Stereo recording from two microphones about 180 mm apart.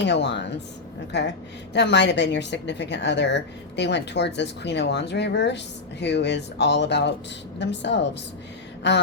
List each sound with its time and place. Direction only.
0.0 s a woman's voice: 75° left (ahead or behind)